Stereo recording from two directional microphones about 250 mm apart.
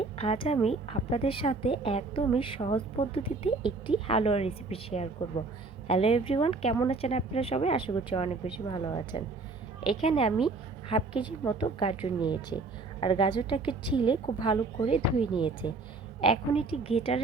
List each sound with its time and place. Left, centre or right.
0.0 s a woman's voice: left